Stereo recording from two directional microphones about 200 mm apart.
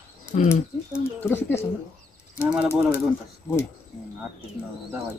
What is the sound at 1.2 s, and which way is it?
Speech, 10° left (ahead or behind).